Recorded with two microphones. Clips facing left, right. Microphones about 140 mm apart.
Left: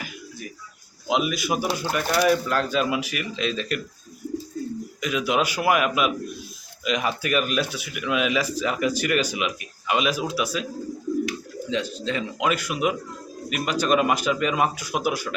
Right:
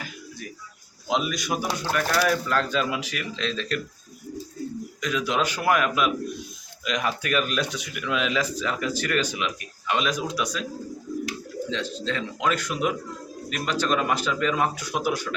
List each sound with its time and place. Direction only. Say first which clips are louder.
1.0 s speech: left 2 dB; 5° left (ahead or behind)
2.0 s speech: left 4 dB; 20° left (ahead or behind)
2.3 s speech: left 2 dB; 10° left (ahead or behind)
4.9 s speech: left 2 dB; 10° left (ahead or behind)
11.7 s speech: left 4 dB; 10° left (ahead or behind)